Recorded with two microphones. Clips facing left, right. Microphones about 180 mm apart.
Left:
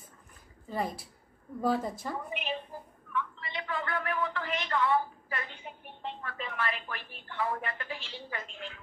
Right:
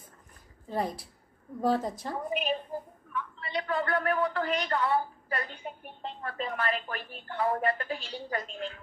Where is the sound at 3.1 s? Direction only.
40° right (ahead or behind).